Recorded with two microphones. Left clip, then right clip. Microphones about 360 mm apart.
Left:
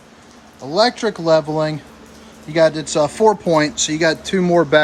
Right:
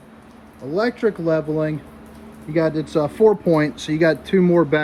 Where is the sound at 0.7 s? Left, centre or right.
Centre.